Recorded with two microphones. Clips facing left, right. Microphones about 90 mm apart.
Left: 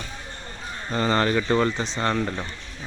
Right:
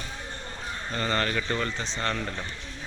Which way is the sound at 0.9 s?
20° left (ahead or behind).